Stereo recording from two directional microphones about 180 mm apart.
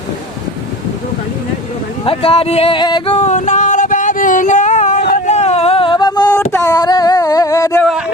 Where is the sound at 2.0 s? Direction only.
30° left (ahead or behind).